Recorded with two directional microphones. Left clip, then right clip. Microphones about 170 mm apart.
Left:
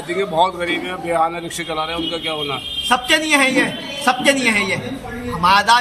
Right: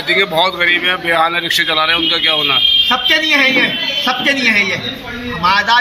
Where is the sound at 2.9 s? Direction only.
40° left (ahead or behind).